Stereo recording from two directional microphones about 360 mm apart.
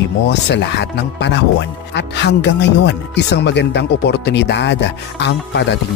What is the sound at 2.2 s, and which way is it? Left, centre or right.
Speech, left.